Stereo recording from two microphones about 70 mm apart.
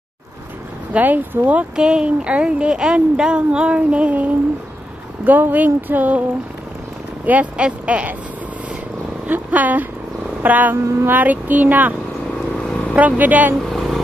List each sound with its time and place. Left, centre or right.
0.9 s speech: right
1.8 s a woman's voice: centre
7.2 s speech: centre
9.3 s speech: right
12.9 s speech: right
13.7 s vehicle: centre